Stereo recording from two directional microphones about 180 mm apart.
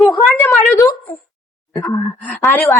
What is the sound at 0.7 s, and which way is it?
A woman's voice, 20° left (ahead or behind).